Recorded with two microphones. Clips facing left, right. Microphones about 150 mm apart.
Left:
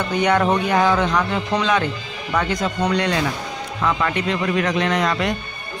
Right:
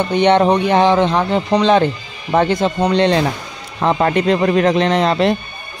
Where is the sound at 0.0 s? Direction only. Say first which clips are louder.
Right 6 dB; 25° right (ahead or behind).